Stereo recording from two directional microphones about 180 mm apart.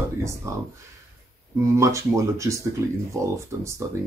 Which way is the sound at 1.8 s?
15° right (ahead or behind).